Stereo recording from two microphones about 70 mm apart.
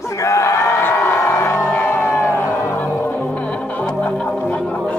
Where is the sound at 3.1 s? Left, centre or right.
Left.